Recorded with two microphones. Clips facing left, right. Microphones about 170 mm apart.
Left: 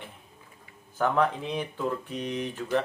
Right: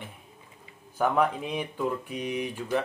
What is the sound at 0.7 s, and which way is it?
Speech, 10° right (ahead or behind).